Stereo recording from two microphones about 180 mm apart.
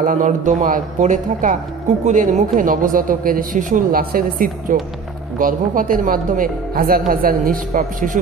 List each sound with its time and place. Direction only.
0.0 s speech: 45° right (ahead or behind)